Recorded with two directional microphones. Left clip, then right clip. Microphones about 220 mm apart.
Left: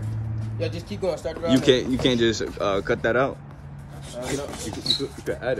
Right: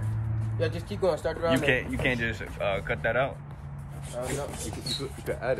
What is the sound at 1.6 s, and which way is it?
Speech, 90° left.